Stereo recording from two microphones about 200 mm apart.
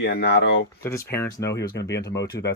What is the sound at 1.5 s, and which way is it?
Speech, 60° left (ahead or behind).